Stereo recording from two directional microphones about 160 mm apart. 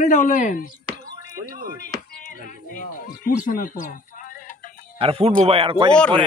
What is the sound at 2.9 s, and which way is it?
Music, 60° left (ahead or behind).